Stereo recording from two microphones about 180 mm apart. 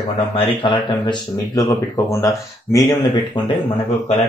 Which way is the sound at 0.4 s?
25° left (ahead or behind).